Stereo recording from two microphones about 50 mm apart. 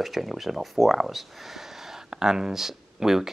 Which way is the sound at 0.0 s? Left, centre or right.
Centre.